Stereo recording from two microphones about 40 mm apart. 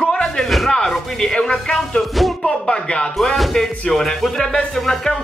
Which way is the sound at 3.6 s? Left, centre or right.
Centre.